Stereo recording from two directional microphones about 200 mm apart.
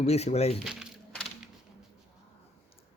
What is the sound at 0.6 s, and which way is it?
Crushing, centre (ahead or behind).